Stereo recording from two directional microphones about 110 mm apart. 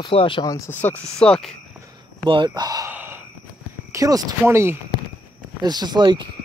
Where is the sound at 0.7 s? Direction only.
15° left (ahead or behind).